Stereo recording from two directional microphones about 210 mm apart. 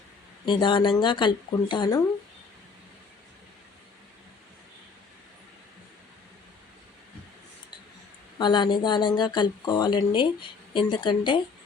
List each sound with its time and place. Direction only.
0.4 s speech: 20° left (ahead or behind)
8.4 s speech: 20° left (ahead or behind)